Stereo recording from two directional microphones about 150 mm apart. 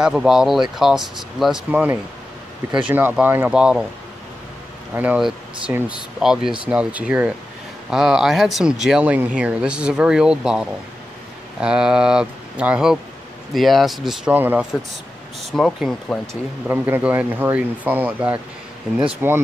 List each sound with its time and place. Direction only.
0.0 s speech: 5° right (ahead or behind)
4.9 s speech: 10° right (ahead or behind)
15.5 s speech: centre (ahead or behind)
16.6 s speech: 15° right (ahead or behind)